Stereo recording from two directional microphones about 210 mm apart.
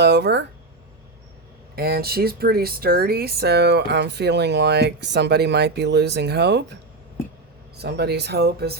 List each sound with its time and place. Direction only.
0.0 s speech: 50° right (ahead or behind)
1.7 s speech: 45° right (ahead or behind)
7.8 s speech: 50° right (ahead or behind)